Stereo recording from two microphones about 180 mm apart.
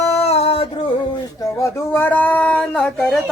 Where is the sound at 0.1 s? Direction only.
35° left (ahead or behind).